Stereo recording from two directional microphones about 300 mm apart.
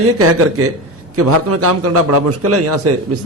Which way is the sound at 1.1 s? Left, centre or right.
Right.